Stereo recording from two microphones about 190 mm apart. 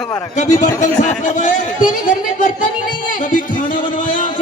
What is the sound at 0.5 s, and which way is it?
Speech, 20° left (ahead or behind).